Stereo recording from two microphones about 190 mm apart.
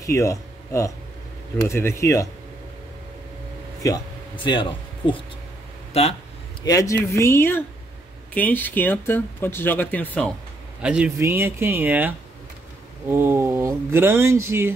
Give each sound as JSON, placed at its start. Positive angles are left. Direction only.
{"t": 0.0, "sound": "speech", "side_deg": 15}
{"t": 3.8, "sound": "speech", "side_deg": 20}
{"t": 6.6, "sound": "speech", "side_deg": 20}
{"t": 10.8, "sound": "speech", "side_deg": -5}
{"t": 13.1, "sound": "speech", "side_deg": -10}